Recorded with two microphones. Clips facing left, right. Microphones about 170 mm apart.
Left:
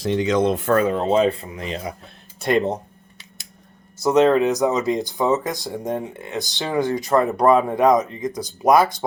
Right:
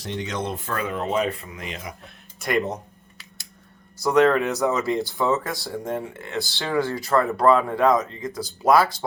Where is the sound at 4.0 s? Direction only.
20° left (ahead or behind).